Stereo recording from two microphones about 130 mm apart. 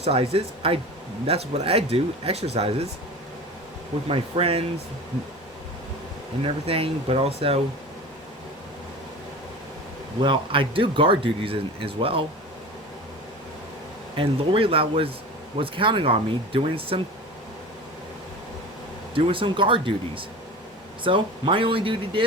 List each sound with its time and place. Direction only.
0.0 s speech: 50° right (ahead or behind)
4.1 s speech: 45° right (ahead or behind)
6.4 s speech: 45° right (ahead or behind)
10.2 s speech: 40° right (ahead or behind)
14.2 s speech: 45° right (ahead or behind)
19.1 s speech: 45° right (ahead or behind)